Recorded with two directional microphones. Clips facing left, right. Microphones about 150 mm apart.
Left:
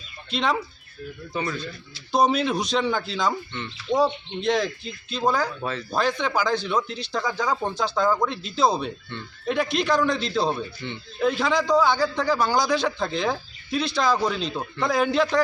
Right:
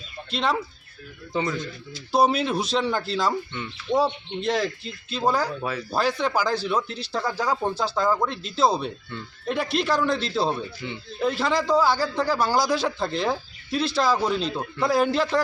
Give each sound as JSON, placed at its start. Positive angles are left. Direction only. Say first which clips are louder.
{"t": 0.3, "sound": "speech", "louder": "left 1 dB", "side_deg": 0}
{"t": 1.3, "sound": "speech", "louder": "right 3 dB", "side_deg": -20}
{"t": 2.1, "sound": "speech", "louder": "even", "side_deg": -5}